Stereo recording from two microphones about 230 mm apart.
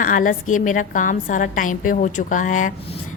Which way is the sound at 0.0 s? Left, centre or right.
Left.